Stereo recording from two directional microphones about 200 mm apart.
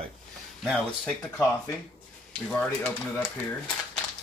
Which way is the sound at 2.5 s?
5° left (ahead or behind).